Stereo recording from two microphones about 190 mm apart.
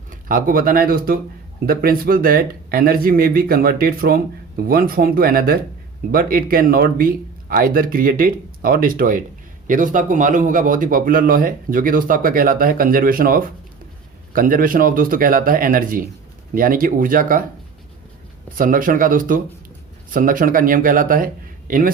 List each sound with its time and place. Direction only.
0.1 s speech: 45° right (ahead or behind)
18.5 s speech: 45° right (ahead or behind)